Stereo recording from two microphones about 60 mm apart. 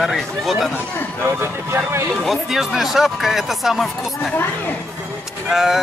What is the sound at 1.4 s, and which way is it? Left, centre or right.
Speech, right.